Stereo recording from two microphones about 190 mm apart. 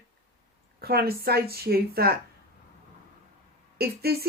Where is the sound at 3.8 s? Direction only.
55° right (ahead or behind).